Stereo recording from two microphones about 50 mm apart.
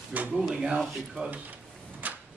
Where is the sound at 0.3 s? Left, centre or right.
Centre.